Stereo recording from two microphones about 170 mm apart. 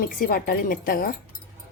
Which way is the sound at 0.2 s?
60° left (ahead or behind).